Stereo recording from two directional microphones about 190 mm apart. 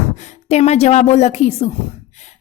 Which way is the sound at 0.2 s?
35° left (ahead or behind).